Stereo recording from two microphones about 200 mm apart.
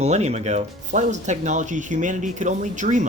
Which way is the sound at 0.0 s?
35° right (ahead or behind).